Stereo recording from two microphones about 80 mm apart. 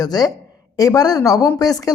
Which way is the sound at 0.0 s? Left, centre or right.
Left.